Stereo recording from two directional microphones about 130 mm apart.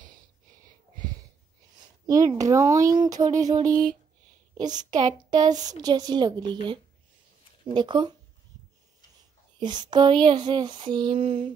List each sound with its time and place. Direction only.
2.0 s a woman's voice: 25° right (ahead or behind)
9.6 s a woman's voice: 35° right (ahead or behind)